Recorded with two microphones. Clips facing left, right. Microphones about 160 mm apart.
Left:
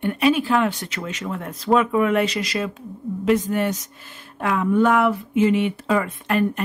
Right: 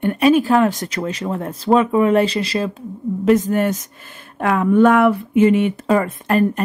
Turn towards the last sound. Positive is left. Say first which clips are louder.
# right 4 dB
turn(degrees=-40)  # may be behind; listen again after turning